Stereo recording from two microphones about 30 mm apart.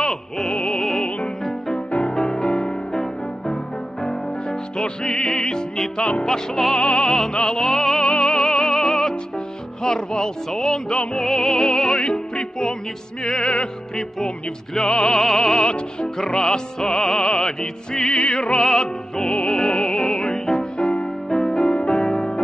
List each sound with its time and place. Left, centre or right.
0.0 s opera: left
2.0 s music: left
4.0 s music: left
6.8 s music: left
7.1 s music: left
8.0 s music: left
13.9 s music: left
15.1 s music: left
20.7 s music: left
21.3 s music: left